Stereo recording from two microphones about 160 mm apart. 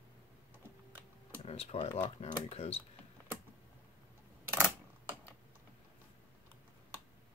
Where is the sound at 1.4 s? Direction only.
40° left (ahead or behind).